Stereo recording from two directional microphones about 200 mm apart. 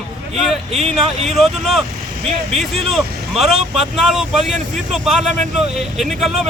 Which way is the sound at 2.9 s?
Centre (ahead or behind).